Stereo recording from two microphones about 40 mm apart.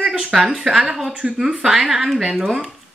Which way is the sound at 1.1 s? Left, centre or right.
Right.